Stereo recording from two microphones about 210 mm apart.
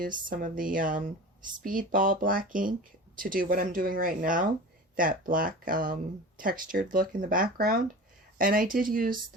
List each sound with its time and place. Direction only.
0.0 s speech: 40° right (ahead or behind)